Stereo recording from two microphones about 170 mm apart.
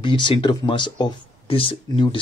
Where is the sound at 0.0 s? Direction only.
25° left (ahead or behind).